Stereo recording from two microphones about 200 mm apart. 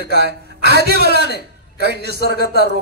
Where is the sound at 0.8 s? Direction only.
55° right (ahead or behind).